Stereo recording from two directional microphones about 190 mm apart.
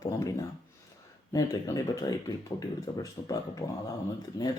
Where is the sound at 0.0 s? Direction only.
15° left (ahead or behind).